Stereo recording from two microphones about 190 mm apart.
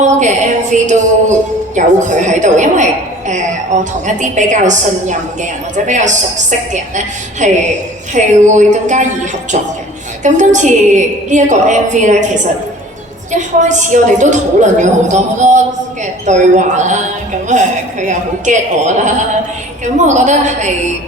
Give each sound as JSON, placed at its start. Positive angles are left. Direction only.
{"t": 0.0, "sound": "speech", "side_deg": -40}
{"t": 4.0, "sound": "speech", "side_deg": -40}